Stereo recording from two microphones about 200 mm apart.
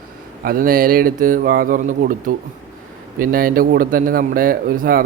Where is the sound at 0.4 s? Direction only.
45° right (ahead or behind).